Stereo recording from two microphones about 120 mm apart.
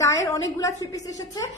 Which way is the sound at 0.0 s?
25° left (ahead or behind).